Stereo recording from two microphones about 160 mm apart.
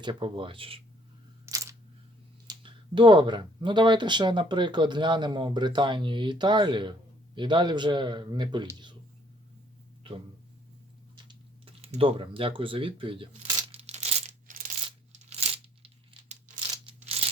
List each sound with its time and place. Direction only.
0.0 s speech: 30° right (ahead or behind)
1.5 s camera: 15° right (ahead or behind)
2.5 s speech: 30° right (ahead or behind)
10.0 s speech: 30° right (ahead or behind)
11.3 s speech: 40° right (ahead or behind)
13.6 s a sound: 40° right (ahead or behind)
15.3 s tearing: 35° right (ahead or behind)
16.8 s a sound: 40° right (ahead or behind)